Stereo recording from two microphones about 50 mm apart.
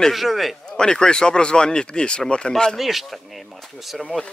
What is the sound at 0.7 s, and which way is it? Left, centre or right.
Speech, centre.